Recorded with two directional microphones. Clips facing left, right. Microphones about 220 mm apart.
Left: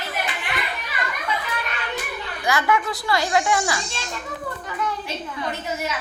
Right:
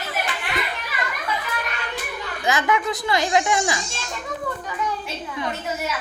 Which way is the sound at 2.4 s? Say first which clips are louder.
Even; 20° right (ahead or behind).